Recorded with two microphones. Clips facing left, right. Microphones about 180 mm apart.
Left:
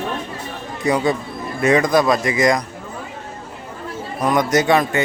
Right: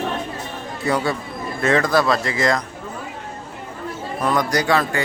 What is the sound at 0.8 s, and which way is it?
A man's voice, 15° left (ahead or behind).